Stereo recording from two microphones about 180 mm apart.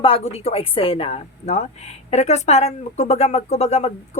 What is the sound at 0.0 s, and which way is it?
Speech, 30° left (ahead or behind).